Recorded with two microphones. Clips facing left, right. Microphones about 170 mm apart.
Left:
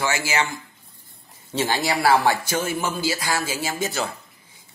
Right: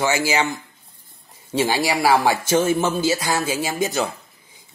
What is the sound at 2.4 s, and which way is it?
A man's voice, 25° right (ahead or behind).